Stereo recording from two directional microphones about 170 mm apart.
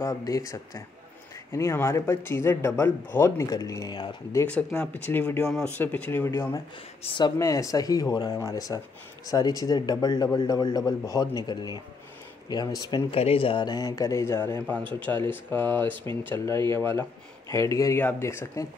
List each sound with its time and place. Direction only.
0.0 s speech: 20° left (ahead or behind)